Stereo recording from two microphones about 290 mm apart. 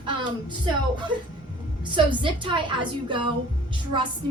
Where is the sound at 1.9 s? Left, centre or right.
Centre.